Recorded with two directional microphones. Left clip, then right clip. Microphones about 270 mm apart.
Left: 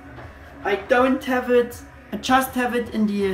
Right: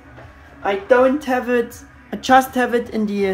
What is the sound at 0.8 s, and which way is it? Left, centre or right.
A woman's voice, centre.